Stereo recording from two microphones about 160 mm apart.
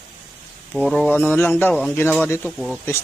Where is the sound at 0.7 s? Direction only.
Centre (ahead or behind).